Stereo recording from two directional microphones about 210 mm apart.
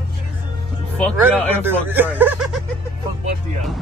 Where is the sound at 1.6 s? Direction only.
10° right (ahead or behind).